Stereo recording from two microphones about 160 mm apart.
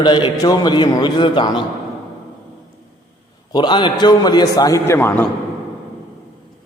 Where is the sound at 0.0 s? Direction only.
30° left (ahead or behind).